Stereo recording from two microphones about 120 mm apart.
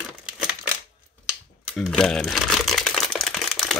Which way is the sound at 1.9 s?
5° left (ahead or behind).